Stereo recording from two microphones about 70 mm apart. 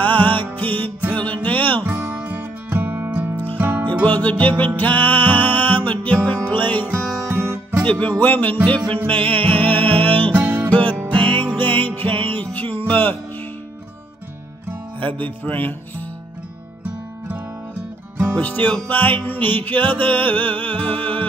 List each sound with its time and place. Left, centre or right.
0.0 s music: left
1.9 s music: right
4.0 s music: left
7.2 s music: right
7.8 s speech: centre
8.2 s music: left
10.3 s music: right
10.7 s music: left
15.0 s music: left
18.3 s music: left